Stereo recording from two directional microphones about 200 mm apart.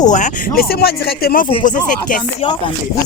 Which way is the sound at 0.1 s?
40° left (ahead or behind).